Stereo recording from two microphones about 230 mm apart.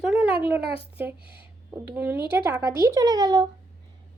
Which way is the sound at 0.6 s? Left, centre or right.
Left.